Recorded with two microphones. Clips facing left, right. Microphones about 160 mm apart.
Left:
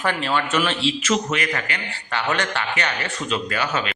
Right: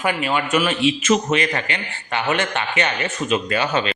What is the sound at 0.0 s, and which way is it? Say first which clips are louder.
Speech: right 1 dB; 10° right (ahead or behind).